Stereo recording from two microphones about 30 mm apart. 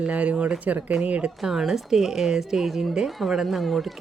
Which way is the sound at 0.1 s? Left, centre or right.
Right.